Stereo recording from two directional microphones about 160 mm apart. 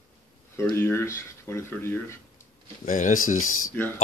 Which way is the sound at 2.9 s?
55° left (ahead or behind).